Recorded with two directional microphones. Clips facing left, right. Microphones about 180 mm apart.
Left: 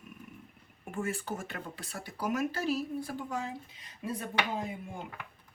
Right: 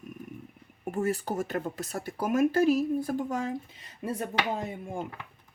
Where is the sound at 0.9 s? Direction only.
40° right (ahead or behind).